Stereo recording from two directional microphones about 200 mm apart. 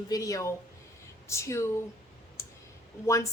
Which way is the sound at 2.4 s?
15° left (ahead or behind).